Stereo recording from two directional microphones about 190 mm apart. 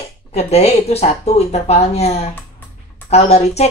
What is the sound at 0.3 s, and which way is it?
A woman's voice, 35° left (ahead or behind).